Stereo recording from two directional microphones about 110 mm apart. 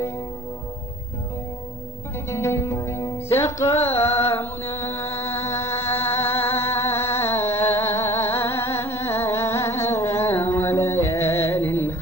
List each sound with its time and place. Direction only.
2.2 s music: 25° left (ahead or behind)